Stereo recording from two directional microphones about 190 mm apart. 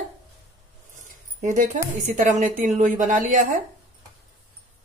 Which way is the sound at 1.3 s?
40° right (ahead or behind).